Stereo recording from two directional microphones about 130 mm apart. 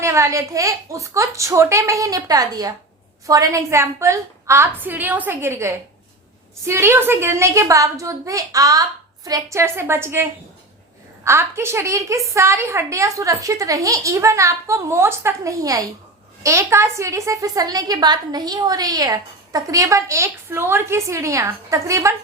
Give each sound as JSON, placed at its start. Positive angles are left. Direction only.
{"t": 0.0, "sound": "a woman's voice", "side_deg": -20}